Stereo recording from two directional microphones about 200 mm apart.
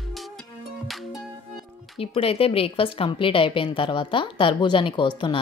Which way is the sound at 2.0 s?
30° left (ahead or behind).